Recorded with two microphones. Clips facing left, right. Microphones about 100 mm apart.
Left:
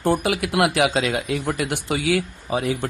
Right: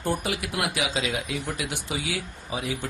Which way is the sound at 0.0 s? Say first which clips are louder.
Left 7 dB; 85° left.